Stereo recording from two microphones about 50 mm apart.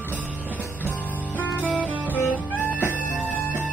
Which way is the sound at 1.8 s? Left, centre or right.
Right.